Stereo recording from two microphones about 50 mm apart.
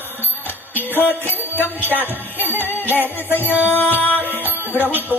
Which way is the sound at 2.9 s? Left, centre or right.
Left.